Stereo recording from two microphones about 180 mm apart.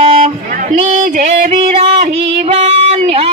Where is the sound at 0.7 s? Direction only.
40° right (ahead or behind).